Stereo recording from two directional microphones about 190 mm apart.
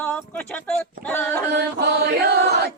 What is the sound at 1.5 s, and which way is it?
Chant, 60° right (ahead or behind).